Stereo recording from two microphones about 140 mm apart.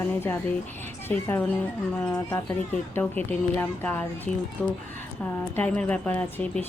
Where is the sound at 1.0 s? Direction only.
15° left (ahead or behind).